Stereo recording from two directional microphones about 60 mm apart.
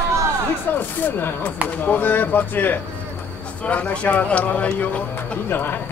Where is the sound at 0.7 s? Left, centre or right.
Left.